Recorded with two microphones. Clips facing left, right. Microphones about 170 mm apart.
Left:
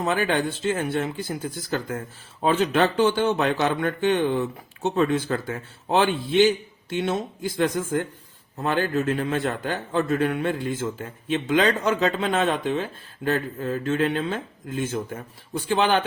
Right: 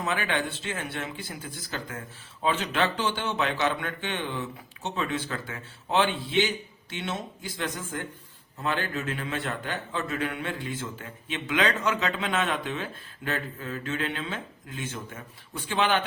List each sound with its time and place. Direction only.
0.0 s a man's voice: 40° left (ahead or behind)